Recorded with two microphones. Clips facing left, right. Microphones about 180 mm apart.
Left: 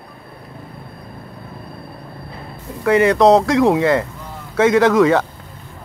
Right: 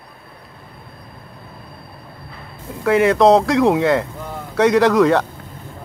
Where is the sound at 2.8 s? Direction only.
Centre (ahead or behind).